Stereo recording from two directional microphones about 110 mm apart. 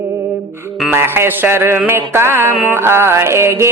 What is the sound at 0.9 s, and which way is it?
Speech, 20° right (ahead or behind).